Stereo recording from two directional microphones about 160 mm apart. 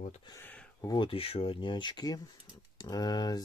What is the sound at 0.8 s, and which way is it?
Speech, 30° left (ahead or behind).